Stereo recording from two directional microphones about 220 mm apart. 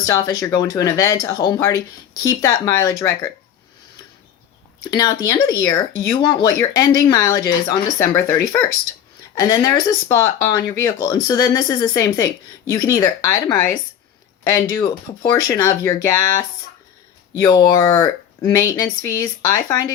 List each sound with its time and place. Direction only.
0.0 s speech: 15° left (ahead or behind)
4.8 s speech: 20° left (ahead or behind)
17.3 s speech: 15° left (ahead or behind)